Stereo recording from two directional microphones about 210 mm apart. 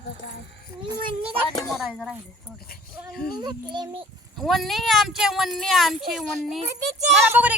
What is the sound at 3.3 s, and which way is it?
Speech, 20° right (ahead or behind).